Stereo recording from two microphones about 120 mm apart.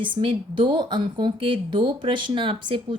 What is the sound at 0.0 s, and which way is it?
A woman's voice, 45° right (ahead or behind).